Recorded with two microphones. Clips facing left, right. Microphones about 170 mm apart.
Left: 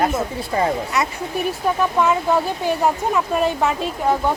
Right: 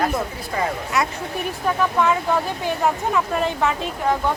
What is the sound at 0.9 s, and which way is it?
Speech, centre (ahead or behind).